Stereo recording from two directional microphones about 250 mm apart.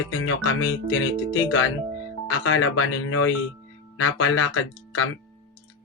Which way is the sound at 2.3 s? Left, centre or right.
Left.